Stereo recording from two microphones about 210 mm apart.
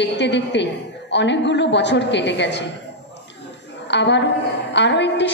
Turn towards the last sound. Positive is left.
turn(degrees=55)  # may be behind; listen again after turning